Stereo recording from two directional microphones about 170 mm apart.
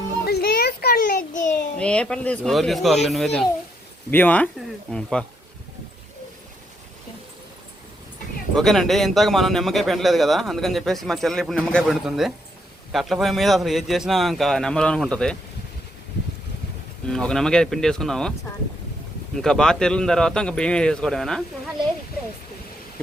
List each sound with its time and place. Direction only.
0.3 s a sound: 70° left (ahead or behind); by 1.6 s 50° left (ahead or behind)
1.8 s speech: 5° left (ahead or behind)
8.5 s speech: centre (ahead or behind)
17.1 s speech: 5° left (ahead or behind)
19.4 s speech: 5° left (ahead or behind)